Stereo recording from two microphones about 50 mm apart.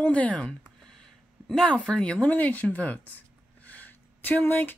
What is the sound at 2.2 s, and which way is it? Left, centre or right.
Speech, left.